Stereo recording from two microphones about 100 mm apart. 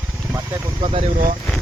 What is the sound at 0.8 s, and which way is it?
Speech, 70° right (ahead or behind).